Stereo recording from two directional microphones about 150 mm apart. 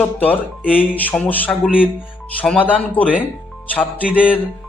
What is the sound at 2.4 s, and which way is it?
Speech, 10° left (ahead or behind).